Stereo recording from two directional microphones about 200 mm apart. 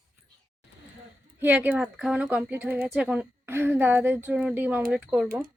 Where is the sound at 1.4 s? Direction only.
10° right (ahead or behind).